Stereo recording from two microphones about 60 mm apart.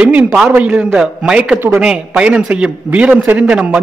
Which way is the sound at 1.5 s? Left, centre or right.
Right.